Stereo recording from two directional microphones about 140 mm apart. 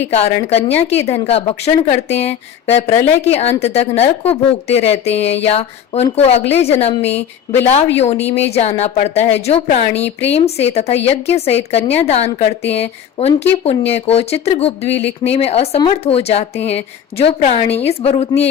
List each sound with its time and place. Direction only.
0.0 s a woman's voice: 50° left (ahead or behind)